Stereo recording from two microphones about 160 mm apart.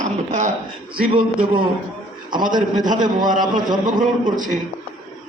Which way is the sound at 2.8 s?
55° right (ahead or behind).